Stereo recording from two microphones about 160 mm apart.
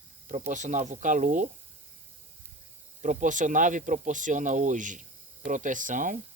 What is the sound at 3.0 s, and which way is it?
Speech, 50° right (ahead or behind).